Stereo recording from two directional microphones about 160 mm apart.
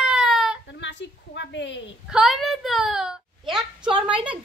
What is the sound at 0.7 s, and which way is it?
Speech, 90° left.